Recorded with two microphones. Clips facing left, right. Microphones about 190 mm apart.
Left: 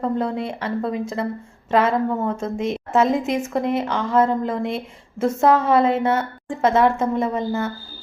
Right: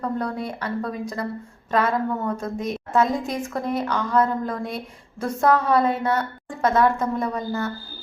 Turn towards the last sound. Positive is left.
turn(degrees=25)  # may be behind; listen again after turning